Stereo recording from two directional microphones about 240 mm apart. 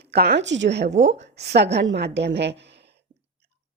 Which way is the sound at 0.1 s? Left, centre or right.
Right.